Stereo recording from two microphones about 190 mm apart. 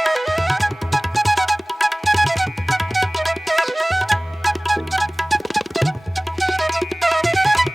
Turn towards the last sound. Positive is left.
turn(degrees=0)  # may be behind; listen again after turning